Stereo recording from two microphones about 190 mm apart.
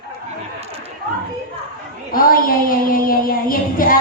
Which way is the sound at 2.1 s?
50° left (ahead or behind).